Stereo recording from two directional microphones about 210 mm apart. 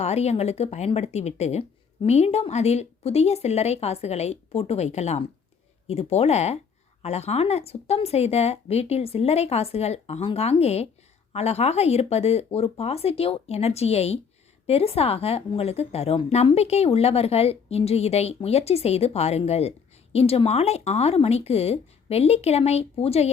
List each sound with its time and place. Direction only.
0.0 s a woman's voice: 30° left (ahead or behind)